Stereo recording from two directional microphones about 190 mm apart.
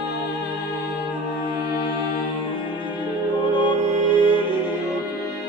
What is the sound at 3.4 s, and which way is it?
Music, 25° left (ahead or behind).